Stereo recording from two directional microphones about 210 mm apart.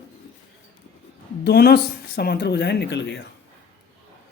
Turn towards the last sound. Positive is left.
turn(degrees=55)  # may be behind; listen again after turning